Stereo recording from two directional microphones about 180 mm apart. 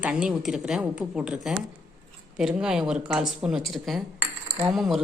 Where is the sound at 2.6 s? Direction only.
5° right (ahead or behind).